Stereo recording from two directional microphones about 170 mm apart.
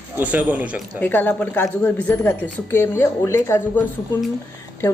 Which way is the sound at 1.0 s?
10° left (ahead or behind).